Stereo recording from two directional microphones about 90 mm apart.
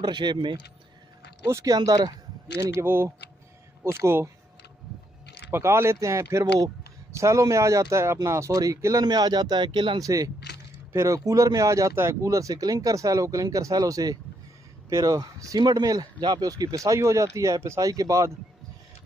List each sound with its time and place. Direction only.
0.0 s speech: 55° right (ahead or behind)
1.4 s speech: 35° right (ahead or behind)
2.5 s speech: 30° right (ahead or behind)
5.5 s speech: 30° right (ahead or behind); by 9.9 s 60° right (ahead or behind)
9.9 s speech: 40° right (ahead or behind)